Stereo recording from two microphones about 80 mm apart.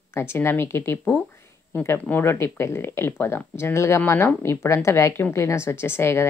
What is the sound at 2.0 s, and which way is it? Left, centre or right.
Speech, left.